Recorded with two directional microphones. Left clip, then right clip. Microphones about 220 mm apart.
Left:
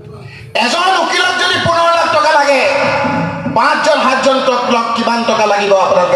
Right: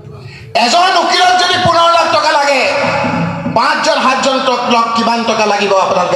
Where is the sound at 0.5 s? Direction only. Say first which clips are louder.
Right 2 dB; 40° right (ahead or behind).